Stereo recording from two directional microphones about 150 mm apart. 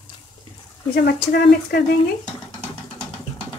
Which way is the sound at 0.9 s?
90° left.